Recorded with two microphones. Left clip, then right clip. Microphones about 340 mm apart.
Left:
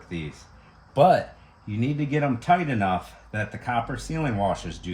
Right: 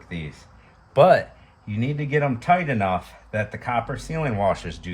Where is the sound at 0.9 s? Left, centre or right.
Centre.